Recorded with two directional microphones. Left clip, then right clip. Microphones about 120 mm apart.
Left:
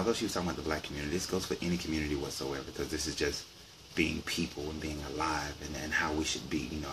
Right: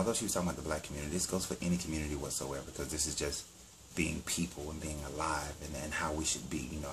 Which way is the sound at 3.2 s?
15° right (ahead or behind).